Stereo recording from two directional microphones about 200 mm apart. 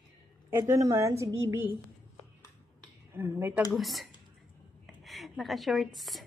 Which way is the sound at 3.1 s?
10° right (ahead or behind).